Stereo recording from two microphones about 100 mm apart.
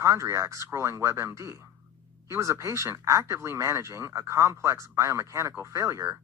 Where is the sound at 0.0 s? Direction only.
30° right (ahead or behind).